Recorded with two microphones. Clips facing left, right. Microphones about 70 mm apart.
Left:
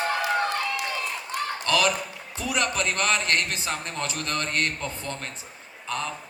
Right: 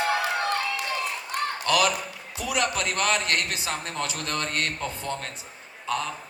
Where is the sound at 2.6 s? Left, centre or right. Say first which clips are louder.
Even; left.